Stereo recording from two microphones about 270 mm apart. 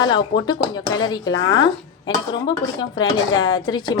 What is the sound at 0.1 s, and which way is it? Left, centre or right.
A woman's voice, centre.